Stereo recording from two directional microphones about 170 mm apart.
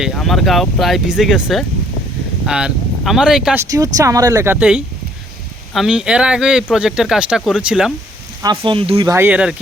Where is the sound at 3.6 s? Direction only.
20° right (ahead or behind).